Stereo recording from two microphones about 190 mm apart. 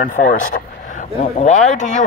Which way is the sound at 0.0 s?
45° left (ahead or behind).